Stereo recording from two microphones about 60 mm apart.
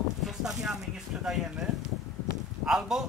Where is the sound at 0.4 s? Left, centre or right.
Centre.